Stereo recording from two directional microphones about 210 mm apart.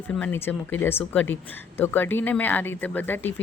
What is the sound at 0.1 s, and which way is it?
Speech, 10° left (ahead or behind).